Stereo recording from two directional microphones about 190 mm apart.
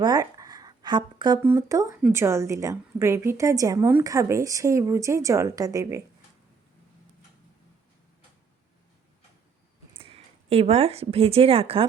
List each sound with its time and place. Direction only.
0.0 s a sound: 20° right (ahead or behind)
1.4 s a woman's voice: 15° right (ahead or behind)
10.0 s speech: 30° right (ahead or behind)